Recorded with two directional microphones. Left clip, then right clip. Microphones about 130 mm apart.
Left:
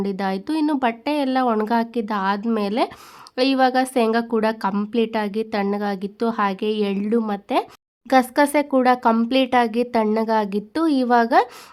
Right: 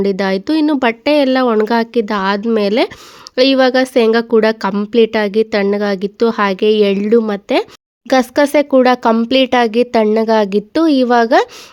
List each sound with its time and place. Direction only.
0.0 s speech: 40° right (ahead or behind)